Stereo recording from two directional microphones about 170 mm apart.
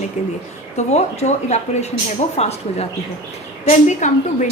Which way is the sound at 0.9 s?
40° left (ahead or behind).